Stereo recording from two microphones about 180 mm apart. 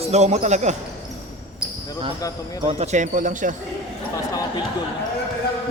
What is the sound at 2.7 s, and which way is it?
Speech, 40° right (ahead or behind).